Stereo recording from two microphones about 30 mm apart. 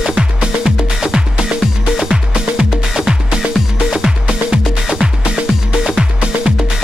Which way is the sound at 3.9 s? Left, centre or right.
Right.